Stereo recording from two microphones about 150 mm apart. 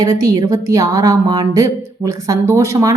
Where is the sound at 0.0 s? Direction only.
25° right (ahead or behind).